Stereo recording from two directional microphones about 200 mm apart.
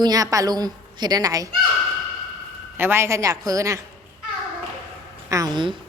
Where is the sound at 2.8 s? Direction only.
10° right (ahead or behind).